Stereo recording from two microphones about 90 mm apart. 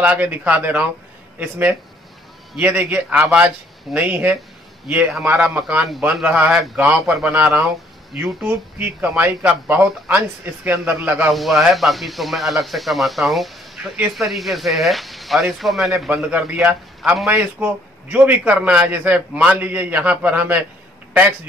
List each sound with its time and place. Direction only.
0.0 s a man's voice: 20° right (ahead or behind)
11.3 s speech: centre (ahead or behind)
16.3 s a man's voice: 15° right (ahead or behind)
17.0 s speech: 5° right (ahead or behind)
17.3 s a man's voice: 20° right (ahead or behind)